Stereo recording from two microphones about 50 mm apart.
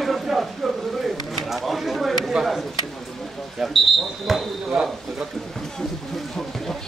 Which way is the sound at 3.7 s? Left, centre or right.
Centre.